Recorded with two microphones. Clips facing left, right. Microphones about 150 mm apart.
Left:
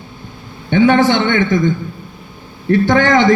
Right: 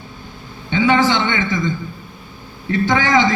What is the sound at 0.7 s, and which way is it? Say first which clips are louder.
A man's voice: left 4 dB; 60° left (ahead or behind).